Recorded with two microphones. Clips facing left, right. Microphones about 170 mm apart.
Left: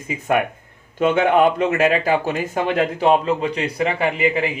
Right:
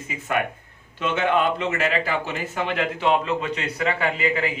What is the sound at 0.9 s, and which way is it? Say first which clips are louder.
A man's voice: left 6 dB; 50° left (ahead or behind).